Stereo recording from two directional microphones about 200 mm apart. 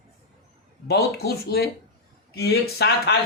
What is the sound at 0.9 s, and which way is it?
Speech, 55° left (ahead or behind).